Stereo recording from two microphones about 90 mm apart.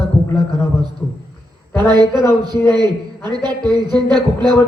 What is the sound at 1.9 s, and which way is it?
Speech, 55° right (ahead or behind).